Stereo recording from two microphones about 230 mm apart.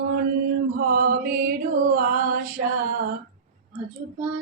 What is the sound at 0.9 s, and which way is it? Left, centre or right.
Mantra, right.